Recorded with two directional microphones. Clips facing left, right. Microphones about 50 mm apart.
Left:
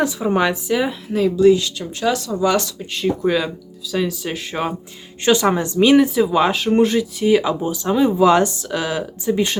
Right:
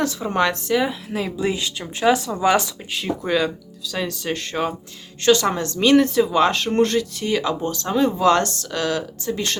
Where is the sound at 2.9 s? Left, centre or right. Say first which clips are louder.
Left 4 dB; centre.